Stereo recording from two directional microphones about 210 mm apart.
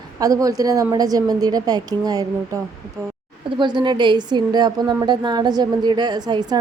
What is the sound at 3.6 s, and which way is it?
A woman's voice, 20° right (ahead or behind).